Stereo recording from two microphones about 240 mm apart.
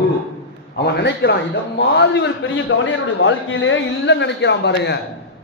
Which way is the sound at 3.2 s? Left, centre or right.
Left.